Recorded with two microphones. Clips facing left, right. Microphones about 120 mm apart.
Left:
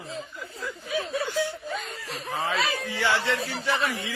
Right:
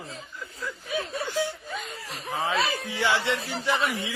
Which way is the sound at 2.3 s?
15° right (ahead or behind).